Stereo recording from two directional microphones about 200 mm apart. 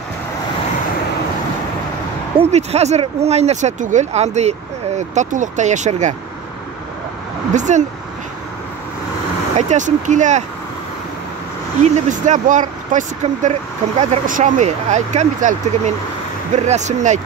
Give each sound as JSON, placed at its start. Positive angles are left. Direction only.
{"t": 2.3, "sound": "speech", "side_deg": -30}
{"t": 7.5, "sound": "speech", "side_deg": -35}
{"t": 9.6, "sound": "speech", "side_deg": -35}
{"t": 11.8, "sound": "speech", "side_deg": -40}